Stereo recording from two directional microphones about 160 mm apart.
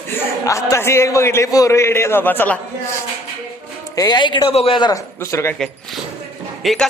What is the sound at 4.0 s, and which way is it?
A man's voice, 25° left (ahead or behind).